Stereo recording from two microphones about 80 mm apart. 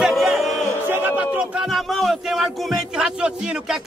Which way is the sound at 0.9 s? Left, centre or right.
Right.